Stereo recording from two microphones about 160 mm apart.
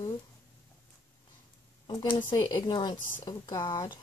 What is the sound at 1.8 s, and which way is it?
A woman's voice, 25° left (ahead or behind).